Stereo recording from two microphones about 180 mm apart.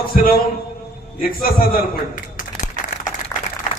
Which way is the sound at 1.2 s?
55° left (ahead or behind).